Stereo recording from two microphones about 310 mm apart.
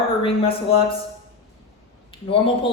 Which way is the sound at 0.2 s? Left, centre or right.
Centre.